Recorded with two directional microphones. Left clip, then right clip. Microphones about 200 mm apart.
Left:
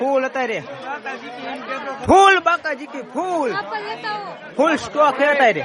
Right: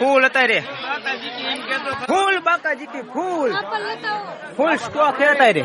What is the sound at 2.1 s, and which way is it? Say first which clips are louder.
Speech: left 7 dB; 45° left (ahead or behind).